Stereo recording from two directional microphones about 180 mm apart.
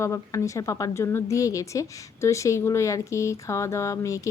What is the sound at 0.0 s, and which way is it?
A woman's voice, 15° left (ahead or behind).